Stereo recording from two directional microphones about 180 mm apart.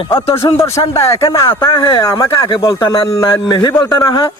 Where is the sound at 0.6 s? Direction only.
15° left (ahead or behind).